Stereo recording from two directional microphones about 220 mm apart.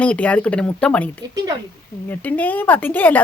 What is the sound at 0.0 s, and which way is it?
Speech, 5° left (ahead or behind).